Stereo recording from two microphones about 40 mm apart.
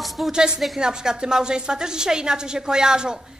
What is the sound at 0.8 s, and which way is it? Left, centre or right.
A woman's voice, centre.